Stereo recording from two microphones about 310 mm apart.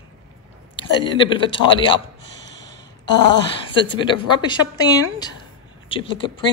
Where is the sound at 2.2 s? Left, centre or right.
Left.